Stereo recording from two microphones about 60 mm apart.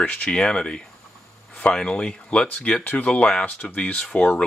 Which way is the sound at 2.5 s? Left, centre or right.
Left.